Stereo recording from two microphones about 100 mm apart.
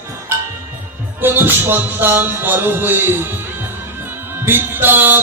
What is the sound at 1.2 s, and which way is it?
Music, 20° right (ahead or behind).